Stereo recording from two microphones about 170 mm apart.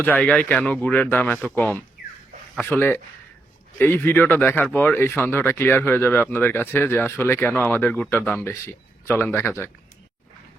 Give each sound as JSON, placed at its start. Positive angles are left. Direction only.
{"t": 0.0, "sound": "speech", "side_deg": 10}